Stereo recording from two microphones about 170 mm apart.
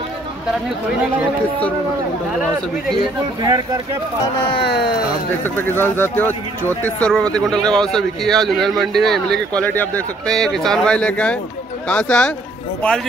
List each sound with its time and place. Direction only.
3.4 s speech: 25° right (ahead or behind)
4.6 s speech: 75° left (ahead or behind)
5.4 s a man's voice: 10° left (ahead or behind)